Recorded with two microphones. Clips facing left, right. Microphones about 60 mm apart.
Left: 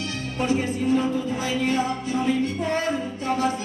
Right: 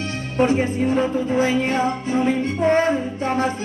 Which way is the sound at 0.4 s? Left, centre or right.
Right.